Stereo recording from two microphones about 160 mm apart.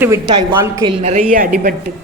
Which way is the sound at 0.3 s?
25° right (ahead or behind).